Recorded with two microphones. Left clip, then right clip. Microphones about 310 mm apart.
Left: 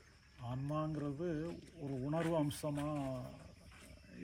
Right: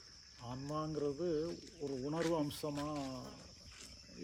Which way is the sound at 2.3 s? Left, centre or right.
Centre.